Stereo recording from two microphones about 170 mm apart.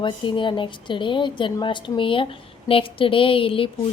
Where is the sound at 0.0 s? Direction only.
30° left (ahead or behind).